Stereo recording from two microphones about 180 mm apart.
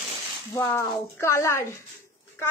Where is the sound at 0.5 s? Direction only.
15° left (ahead or behind).